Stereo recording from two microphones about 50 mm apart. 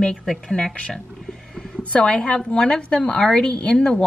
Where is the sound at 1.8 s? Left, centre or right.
Left.